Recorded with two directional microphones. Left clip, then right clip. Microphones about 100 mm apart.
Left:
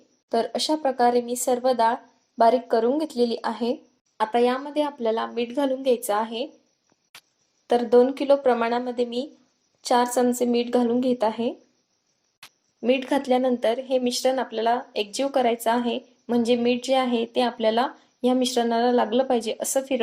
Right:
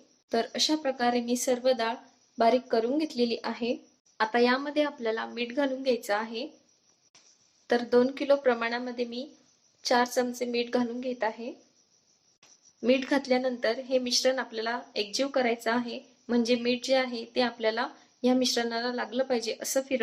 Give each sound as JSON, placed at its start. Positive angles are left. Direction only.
{"t": 0.3, "sound": "speech", "side_deg": 20}
{"t": 7.7, "sound": "speech", "side_deg": 25}
{"t": 12.8, "sound": "speech", "side_deg": 25}